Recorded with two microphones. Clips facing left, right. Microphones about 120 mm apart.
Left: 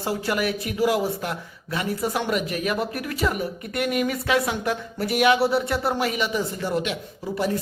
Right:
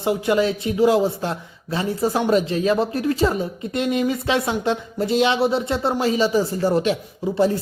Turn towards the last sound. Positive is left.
turn(degrees=-30)  # may be behind; listen again after turning